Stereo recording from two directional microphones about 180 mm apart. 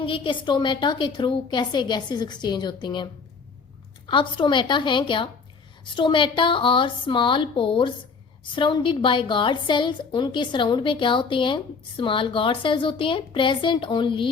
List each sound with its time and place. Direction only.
0.0 s a woman's voice: 30° left (ahead or behind)